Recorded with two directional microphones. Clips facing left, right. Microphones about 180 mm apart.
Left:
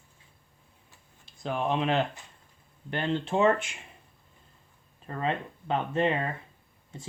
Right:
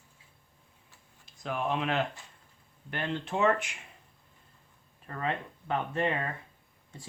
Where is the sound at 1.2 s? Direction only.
30° left (ahead or behind).